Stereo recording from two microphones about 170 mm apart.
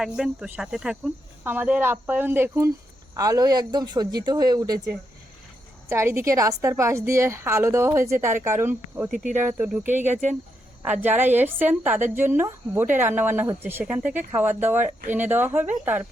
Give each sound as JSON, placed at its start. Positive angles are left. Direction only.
{"t": 0.0, "sound": "a woman's voice", "side_deg": -5}
{"t": 11.0, "sound": "a woman's voice", "side_deg": -10}